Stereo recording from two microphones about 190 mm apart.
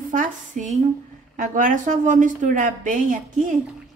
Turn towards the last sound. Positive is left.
turn(degrees=-45)  # may be behind; listen again after turning